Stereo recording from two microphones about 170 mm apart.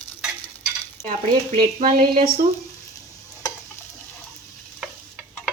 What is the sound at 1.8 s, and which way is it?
Speech, 60° right (ahead or behind).